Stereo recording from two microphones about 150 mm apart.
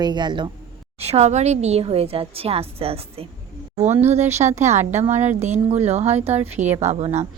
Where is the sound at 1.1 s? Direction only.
45° right (ahead or behind).